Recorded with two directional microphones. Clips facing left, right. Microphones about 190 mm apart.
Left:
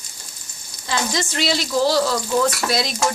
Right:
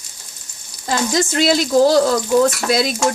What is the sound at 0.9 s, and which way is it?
Speech, 45° right (ahead or behind).